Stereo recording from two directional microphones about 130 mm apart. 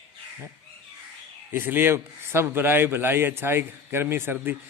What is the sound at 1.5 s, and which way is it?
A man's voice, 15° right (ahead or behind).